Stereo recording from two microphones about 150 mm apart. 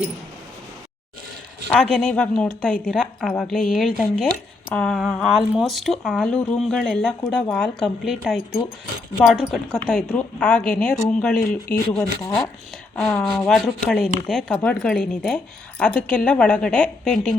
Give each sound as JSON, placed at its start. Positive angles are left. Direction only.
{"t": 1.7, "sound": "speech", "side_deg": 5}
{"t": 11.7, "sound": "speech", "side_deg": 25}
{"t": 13.0, "sound": "a woman's voice", "side_deg": 10}